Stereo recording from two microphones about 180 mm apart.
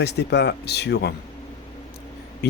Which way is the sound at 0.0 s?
65° left (ahead or behind).